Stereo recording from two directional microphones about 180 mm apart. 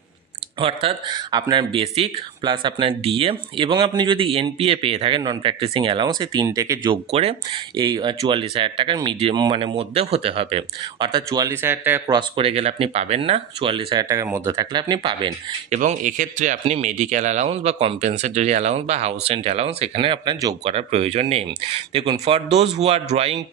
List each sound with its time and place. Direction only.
0.6 s speech: 30° right (ahead or behind)
6.9 s speech: 35° right (ahead or behind); by 12.0 s 10° right (ahead or behind)
12.1 s speech: 25° right (ahead or behind)
14.0 s speech: 15° right (ahead or behind)
15.7 s speech: 45° right (ahead or behind); by 20.5 s 25° right (ahead or behind)
20.6 s speech: 35° right (ahead or behind)